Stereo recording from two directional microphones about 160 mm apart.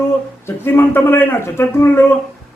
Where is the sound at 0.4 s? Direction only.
15° left (ahead or behind).